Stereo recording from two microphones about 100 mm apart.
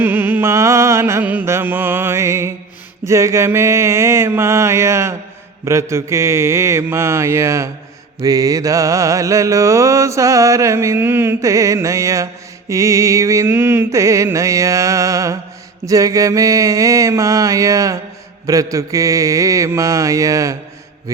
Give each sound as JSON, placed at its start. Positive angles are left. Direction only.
{"t": 0.0, "sound": "music", "side_deg": -20}
{"t": 1.2, "sound": "music", "side_deg": -20}
{"t": 3.0, "sound": "mantra", "side_deg": -30}